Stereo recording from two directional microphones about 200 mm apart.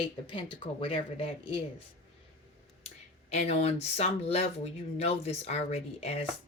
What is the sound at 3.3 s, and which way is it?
Speech, 30° left (ahead or behind).